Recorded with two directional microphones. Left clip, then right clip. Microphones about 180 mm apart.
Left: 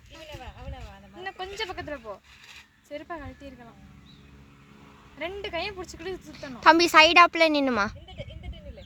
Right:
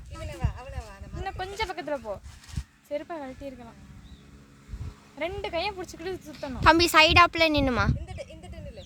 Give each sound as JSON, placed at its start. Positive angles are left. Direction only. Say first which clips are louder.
{"t": 1.2, "sound": "a sound", "louder": "right 2 dB", "side_deg": -50}
{"t": 2.9, "sound": "speech", "louder": "right 4 dB", "side_deg": -50}
{"t": 5.2, "sound": "speech", "louder": "right 2 dB", "side_deg": -50}
{"t": 6.6, "sound": "a woman's voice", "louder": "left 2 dB", "side_deg": 0}